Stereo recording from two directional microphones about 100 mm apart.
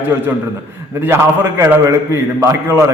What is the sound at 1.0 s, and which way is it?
A man's voice, 20° right (ahead or behind).